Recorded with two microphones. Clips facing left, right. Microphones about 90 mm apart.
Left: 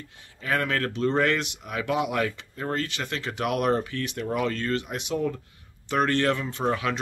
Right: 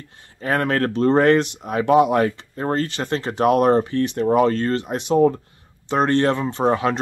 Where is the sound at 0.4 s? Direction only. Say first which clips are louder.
Right 6 dB; 40° right (ahead or behind).